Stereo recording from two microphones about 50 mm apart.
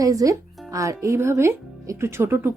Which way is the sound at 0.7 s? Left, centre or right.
Right.